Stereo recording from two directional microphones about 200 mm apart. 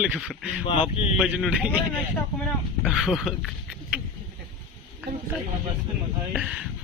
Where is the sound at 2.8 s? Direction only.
Centre (ahead or behind).